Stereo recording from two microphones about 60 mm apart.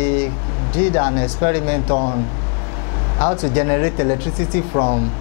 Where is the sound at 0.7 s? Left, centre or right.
Left.